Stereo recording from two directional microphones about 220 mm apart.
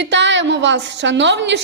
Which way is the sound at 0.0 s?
55° right (ahead or behind).